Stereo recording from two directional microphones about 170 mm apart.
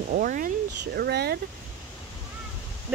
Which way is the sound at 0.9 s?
70° right (ahead or behind).